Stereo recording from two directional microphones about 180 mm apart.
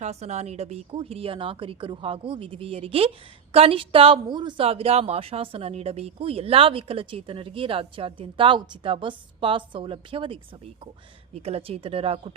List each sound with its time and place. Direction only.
0.0 s a woman's voice: 40° right (ahead or behind)